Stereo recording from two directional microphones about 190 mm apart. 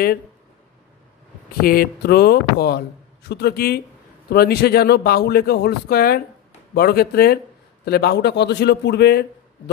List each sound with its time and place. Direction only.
1.6 s speech: 50° left (ahead or behind)